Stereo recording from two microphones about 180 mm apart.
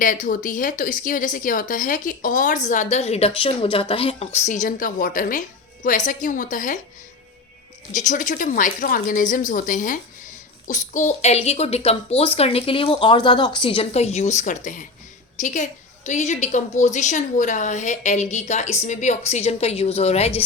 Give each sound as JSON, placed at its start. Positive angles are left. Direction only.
{"t": 0.0, "sound": "a woman's voice", "side_deg": 50}
{"t": 7.9, "sound": "a woman's voice", "side_deg": 45}